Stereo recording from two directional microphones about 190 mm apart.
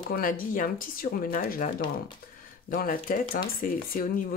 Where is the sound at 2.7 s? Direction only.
50° left (ahead or behind).